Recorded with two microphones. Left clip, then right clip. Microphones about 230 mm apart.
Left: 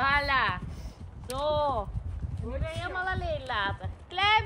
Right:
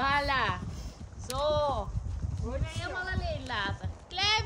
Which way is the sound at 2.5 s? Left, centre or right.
Centre.